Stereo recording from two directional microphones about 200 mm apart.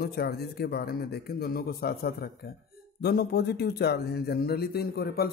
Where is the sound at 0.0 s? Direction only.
50° left (ahead or behind).